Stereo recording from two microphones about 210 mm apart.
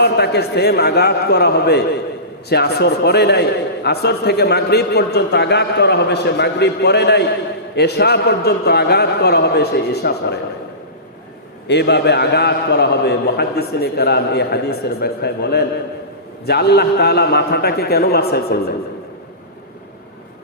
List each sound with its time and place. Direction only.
0.0 s a man's voice: 50° left (ahead or behind)
11.7 s a man's voice: 55° left (ahead or behind)